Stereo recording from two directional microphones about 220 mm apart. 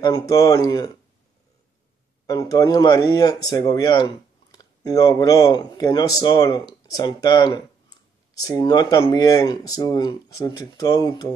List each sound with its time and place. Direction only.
0.0 s speech: 15° left (ahead or behind)
2.2 s speech: 15° left (ahead or behind)